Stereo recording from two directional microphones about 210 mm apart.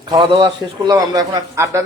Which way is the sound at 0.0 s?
20° right (ahead or behind).